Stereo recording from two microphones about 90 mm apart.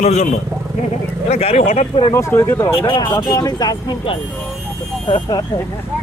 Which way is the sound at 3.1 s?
40° left (ahead or behind).